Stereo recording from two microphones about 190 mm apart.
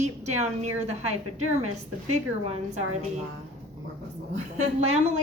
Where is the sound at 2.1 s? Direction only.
35° right (ahead or behind).